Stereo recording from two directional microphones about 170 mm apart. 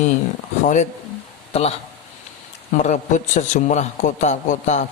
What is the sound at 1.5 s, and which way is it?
A man's voice, 35° left (ahead or behind).